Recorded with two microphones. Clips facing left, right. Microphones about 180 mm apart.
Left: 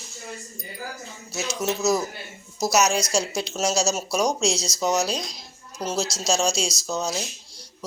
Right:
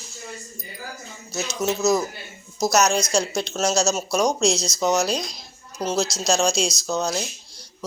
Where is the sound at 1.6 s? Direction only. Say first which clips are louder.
Right 2 dB; 10° left (ahead or behind).